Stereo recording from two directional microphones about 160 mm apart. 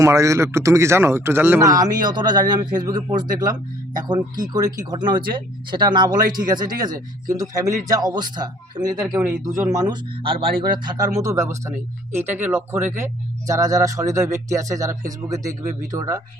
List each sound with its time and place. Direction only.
0.0 s speech: 20° right (ahead or behind)
9.1 s speech: 5° right (ahead or behind)
9.4 s speech: 25° right (ahead or behind)